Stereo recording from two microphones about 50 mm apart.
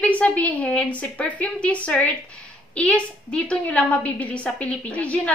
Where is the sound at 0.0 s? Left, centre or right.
Left.